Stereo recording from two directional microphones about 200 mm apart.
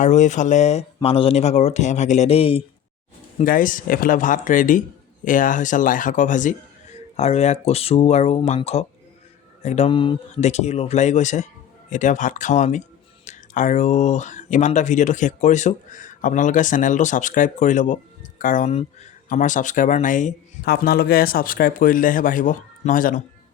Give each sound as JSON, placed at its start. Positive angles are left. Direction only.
{"t": 0.0, "sound": "speech", "side_deg": 35}
{"t": 3.3, "sound": "speech", "side_deg": 40}